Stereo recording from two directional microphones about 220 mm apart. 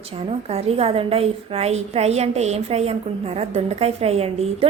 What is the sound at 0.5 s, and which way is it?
A woman's voice, 25° right (ahead or behind).